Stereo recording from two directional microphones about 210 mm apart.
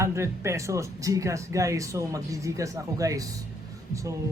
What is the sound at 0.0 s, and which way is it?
Speech, 15° right (ahead or behind).